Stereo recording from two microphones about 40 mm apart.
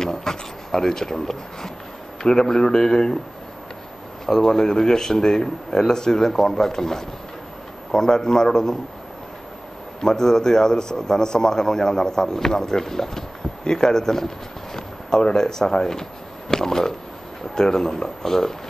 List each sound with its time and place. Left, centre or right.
0.0 s a man's voice: centre
4.3 s a man's voice: centre
10.0 s a man's voice: centre